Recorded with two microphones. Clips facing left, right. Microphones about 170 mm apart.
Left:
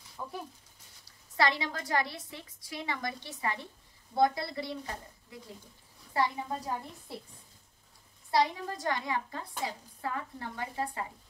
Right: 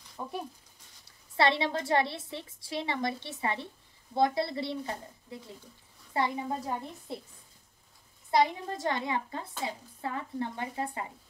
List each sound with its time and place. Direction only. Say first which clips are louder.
0.2 s a woman's voice: right 3 dB; 20° right (ahead or behind)
6.1 s a woman's voice: right 1 dB; 25° right (ahead or behind)
8.3 s a woman's voice: right 2 dB; 20° right (ahead or behind)